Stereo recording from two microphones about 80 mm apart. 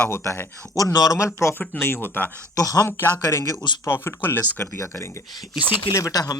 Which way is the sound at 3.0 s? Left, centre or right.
Left.